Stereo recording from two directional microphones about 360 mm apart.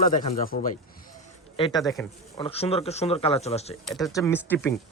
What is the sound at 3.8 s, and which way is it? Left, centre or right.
Speech, centre.